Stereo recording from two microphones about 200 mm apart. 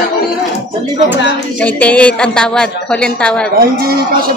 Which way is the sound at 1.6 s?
5° left (ahead or behind).